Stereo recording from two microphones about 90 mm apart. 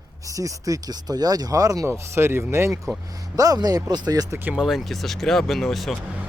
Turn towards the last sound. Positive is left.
turn(degrees=0)  # may be behind; listen again after turning